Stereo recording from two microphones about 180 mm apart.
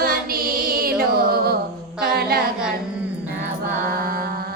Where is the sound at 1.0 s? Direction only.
55° right (ahead or behind).